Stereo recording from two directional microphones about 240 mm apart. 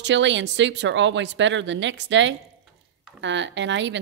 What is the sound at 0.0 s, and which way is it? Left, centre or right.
A woman's voice, right.